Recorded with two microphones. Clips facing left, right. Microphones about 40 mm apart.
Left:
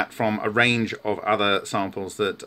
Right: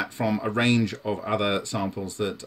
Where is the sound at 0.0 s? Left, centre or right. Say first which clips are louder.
Left 3 dB; left.